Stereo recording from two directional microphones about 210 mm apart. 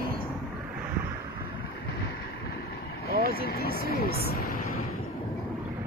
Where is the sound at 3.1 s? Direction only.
45° right (ahead or behind).